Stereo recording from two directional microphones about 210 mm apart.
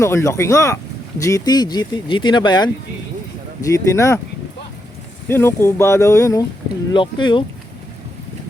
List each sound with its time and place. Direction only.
0.0 s speech: 15° left (ahead or behind)
5.3 s speech: 10° left (ahead or behind)